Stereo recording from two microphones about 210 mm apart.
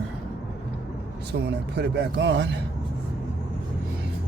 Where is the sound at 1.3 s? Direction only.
55° right (ahead or behind).